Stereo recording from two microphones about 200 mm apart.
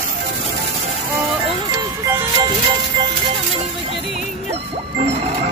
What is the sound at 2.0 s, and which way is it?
Music, 15° right (ahead or behind).